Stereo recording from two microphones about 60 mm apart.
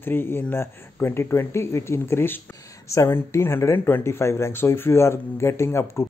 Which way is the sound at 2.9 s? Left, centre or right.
Left.